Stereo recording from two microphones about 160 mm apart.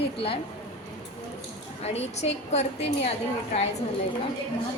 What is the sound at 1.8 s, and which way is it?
A woman's voice, 40° left (ahead or behind).